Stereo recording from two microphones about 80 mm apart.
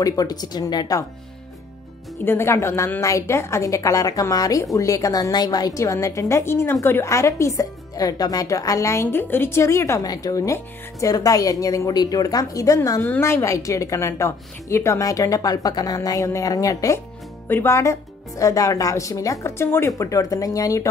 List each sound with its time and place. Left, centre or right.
0.0 s speech: left
2.2 s a woman's voice: left
7.9 s a woman's voice: left
10.0 s a woman's voice: left
17.5 s speech: left
18.4 s a woman's voice: left
19.9 s a woman's voice: left